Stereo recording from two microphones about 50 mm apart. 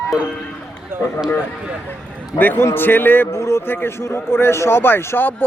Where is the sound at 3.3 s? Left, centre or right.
Left.